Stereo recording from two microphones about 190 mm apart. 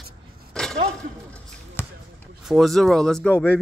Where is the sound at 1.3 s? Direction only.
10° left (ahead or behind).